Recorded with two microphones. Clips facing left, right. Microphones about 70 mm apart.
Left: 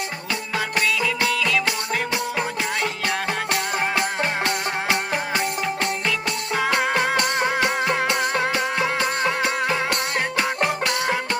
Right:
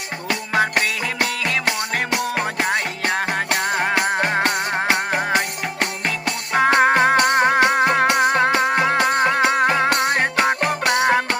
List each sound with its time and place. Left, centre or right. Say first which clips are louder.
0.5 s music: right 4 dB; right
6.5 s music: right 7 dB; right